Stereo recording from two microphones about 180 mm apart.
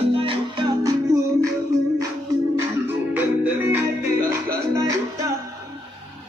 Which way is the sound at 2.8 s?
10° right (ahead or behind).